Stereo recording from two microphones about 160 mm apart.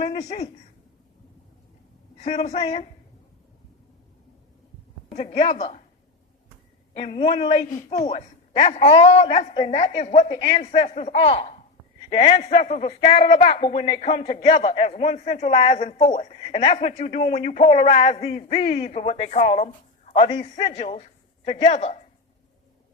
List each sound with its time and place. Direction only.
0.0 s a man's voice: 40° left (ahead or behind)
2.1 s a man's voice: 45° left (ahead or behind)
5.1 s a man's voice: 45° left (ahead or behind)
6.9 s a man's voice: 40° left (ahead or behind)
13.0 s a man's voice: 35° left (ahead or behind)
13.3 s a man's voice: 55° left (ahead or behind)
14.3 s a man's voice: 30° left (ahead or behind); by 16.2 s 50° left (ahead or behind)
16.3 s a man's voice: 40° left (ahead or behind)
20.2 s a man's voice: 30° left (ahead or behind)